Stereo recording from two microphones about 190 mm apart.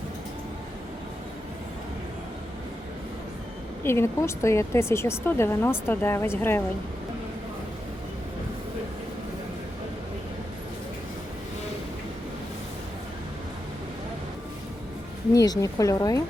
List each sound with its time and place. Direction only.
3.8 s speech: 15° left (ahead or behind)
15.3 s speech: 20° left (ahead or behind)